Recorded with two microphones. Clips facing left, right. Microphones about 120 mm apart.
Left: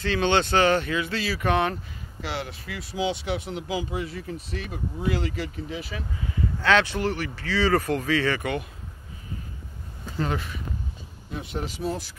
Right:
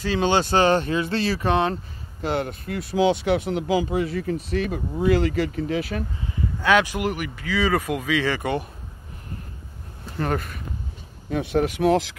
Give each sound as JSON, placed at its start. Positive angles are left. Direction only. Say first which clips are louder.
{"t": 0.0, "sound": "speech", "louder": "right 2 dB", "side_deg": -10}
{"t": 0.8, "sound": "speech", "louder": "right 4 dB", "side_deg": -35}
{"t": 1.4, "sound": "speech", "louder": "even", "side_deg": -25}
{"t": 2.2, "sound": "speech", "louder": "right 7 dB", "side_deg": -50}
{"t": 6.6, "sound": "speech", "louder": "right 2 dB", "side_deg": -15}
{"t": 10.2, "sound": "speech", "louder": "right 4 dB", "side_deg": -50}
{"t": 11.2, "sound": "speech", "louder": "right 10 dB", "side_deg": -70}